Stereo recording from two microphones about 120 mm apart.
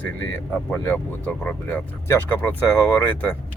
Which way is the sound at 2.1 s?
25° left (ahead or behind).